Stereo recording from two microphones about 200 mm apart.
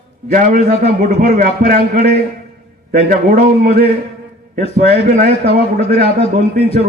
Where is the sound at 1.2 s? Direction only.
45° right (ahead or behind).